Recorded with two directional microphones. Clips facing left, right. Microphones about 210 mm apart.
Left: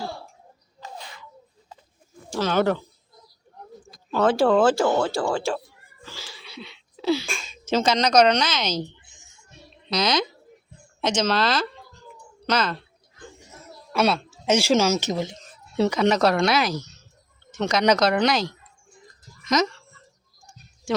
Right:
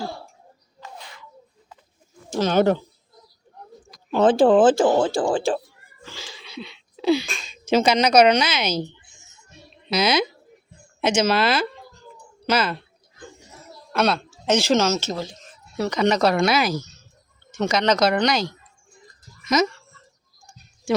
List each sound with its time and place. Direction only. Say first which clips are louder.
0.8 s a sound: left 1 dB; 30° left (ahead or behind)
2.3 s speech: right 3 dB; 20° right (ahead or behind)
4.1 s speech: right 4 dB; 20° right (ahead or behind)
9.9 s speech: right 3 dB; 10° right (ahead or behind)
13.9 s speech: even; 5° left (ahead or behind); by 15.9 s 25° left (ahead or behind)
15.9 s speech: right 2 dB; centre (ahead or behind)